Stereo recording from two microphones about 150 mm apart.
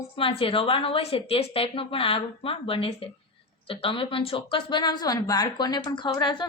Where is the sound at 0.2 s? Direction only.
35° left (ahead or behind).